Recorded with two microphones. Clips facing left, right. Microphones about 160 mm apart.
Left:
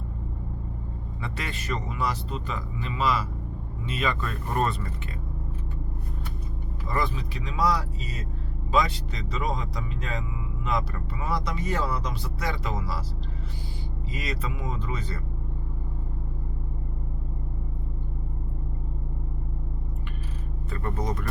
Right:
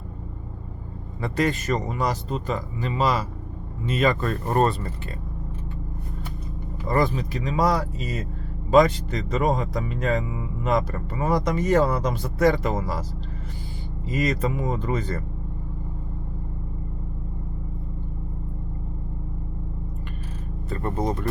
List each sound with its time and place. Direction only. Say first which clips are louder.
1.2 s a man's voice: right 12 dB; 40° right (ahead or behind)
6.8 s speech: right 7 dB; 45° right (ahead or behind)
14.1 s speech: right 10 dB; 45° right (ahead or behind)
20.7 s a man's voice: right 5 dB; 30° right (ahead or behind)